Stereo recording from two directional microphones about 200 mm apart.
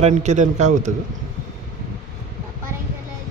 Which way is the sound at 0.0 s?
35° right (ahead or behind).